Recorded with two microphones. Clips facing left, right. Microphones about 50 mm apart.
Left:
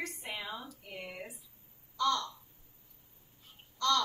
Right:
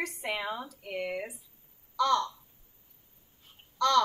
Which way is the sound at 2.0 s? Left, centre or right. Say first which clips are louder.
Right 5 dB; right.